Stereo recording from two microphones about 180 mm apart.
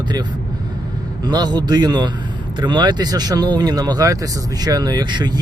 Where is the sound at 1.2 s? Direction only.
25° right (ahead or behind).